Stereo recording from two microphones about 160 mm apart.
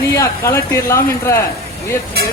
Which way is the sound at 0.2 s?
15° left (ahead or behind).